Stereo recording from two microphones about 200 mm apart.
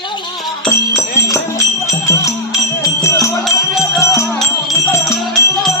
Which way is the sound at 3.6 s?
Centre (ahead or behind).